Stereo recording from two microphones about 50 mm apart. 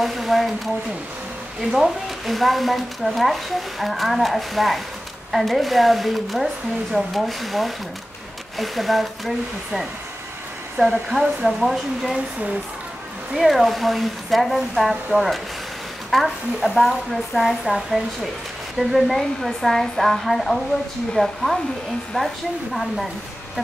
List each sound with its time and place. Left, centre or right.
0.0 s speech: centre
1.7 s speech: centre
11.1 s speech: centre
13.4 s speech: centre